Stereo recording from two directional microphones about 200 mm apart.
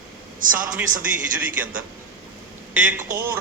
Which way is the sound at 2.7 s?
10° right (ahead or behind).